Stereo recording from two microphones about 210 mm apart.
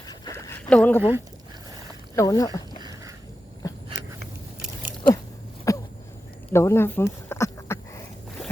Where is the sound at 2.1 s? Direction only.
15° left (ahead or behind).